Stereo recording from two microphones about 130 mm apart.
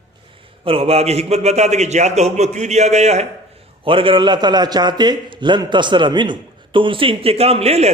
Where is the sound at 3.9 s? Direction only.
40° right (ahead or behind).